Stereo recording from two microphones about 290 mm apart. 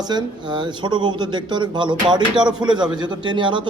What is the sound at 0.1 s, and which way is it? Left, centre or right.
A man's voice, centre.